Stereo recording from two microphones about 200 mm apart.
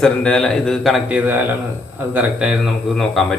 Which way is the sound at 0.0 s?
5° left (ahead or behind).